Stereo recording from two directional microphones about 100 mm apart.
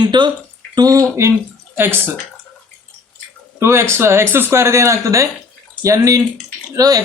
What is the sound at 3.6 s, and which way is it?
Speech, 25° right (ahead or behind).